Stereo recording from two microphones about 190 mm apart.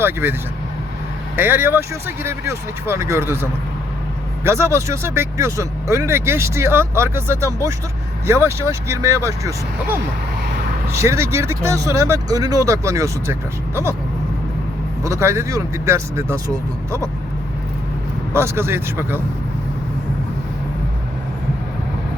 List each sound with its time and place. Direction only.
0.0 s speech: 10° right (ahead or behind)
1.4 s speech: 10° right (ahead or behind)
15.0 s speech: 15° right (ahead or behind)
18.3 s speech: 15° right (ahead or behind)